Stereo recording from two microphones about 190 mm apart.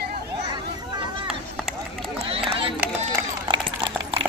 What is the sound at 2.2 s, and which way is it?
Run, 30° right (ahead or behind).